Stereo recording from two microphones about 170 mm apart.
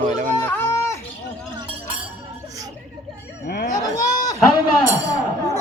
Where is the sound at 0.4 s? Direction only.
10° left (ahead or behind).